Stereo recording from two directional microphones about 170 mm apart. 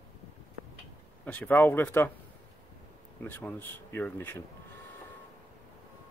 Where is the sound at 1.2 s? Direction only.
10° left (ahead or behind).